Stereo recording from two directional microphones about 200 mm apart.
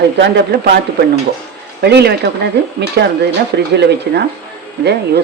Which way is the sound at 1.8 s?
55° right (ahead or behind).